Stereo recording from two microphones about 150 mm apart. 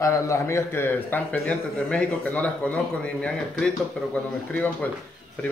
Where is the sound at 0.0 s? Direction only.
20° left (ahead or behind).